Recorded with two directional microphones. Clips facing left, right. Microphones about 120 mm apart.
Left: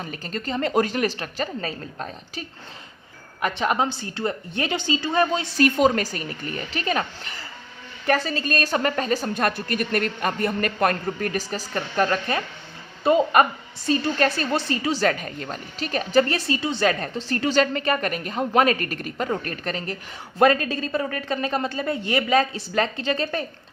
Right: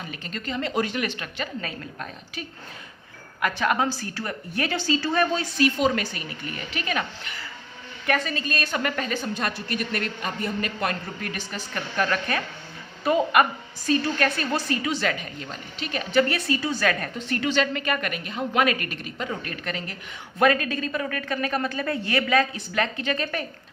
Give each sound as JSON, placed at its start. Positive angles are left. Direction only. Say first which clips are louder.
{"t": 0.0, "sound": "a woman's voice", "louder": "left 4 dB", "side_deg": 40}
{"t": 3.4, "sound": "a woman's voice", "louder": "left 1 dB", "side_deg": 25}
{"t": 5.5, "sound": "a woman's voice", "louder": "left 4 dB", "side_deg": 50}
{"t": 9.3, "sound": "a man's voice", "louder": "left 4 dB", "side_deg": 50}